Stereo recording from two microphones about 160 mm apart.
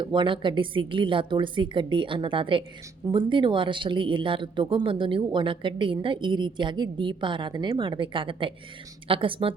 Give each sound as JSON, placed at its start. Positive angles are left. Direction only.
{"t": 0.0, "sound": "speech", "side_deg": -30}